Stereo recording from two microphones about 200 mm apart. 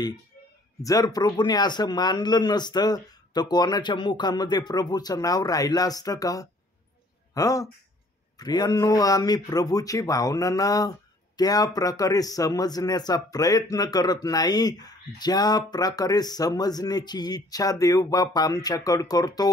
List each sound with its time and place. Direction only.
0.8 s a man's voice: 20° left (ahead or behind)